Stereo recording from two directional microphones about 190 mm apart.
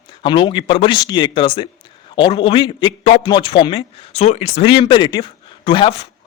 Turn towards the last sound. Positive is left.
turn(degrees=25)  # may be behind; listen again after turning